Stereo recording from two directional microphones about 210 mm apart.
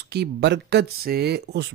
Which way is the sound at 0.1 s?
55° right (ahead or behind).